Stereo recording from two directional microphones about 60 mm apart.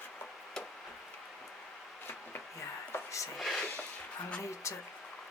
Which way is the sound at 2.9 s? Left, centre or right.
Left.